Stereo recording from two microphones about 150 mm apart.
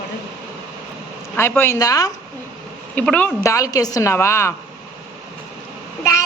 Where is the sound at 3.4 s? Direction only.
20° left (ahead or behind).